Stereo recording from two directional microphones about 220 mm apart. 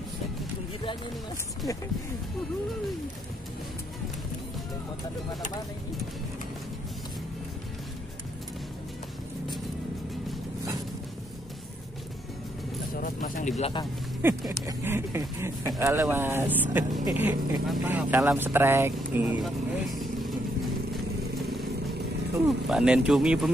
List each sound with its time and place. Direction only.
12.9 s speech: 40° left (ahead or behind)
14.2 s speech: 10° right (ahead or behind)
22.5 s speech: centre (ahead or behind)